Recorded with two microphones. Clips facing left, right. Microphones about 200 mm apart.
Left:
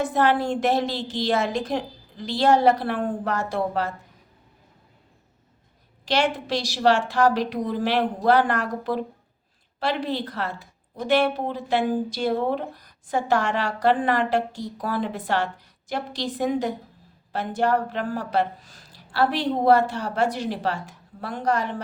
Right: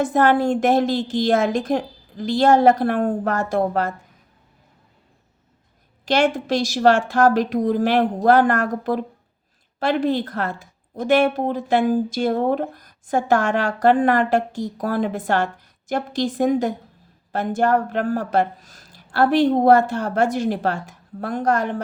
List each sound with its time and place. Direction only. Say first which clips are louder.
0.0 s a woman's voice: right 4 dB; 45° right (ahead or behind)
6.1 s a woman's voice: right 5 dB; 50° right (ahead or behind)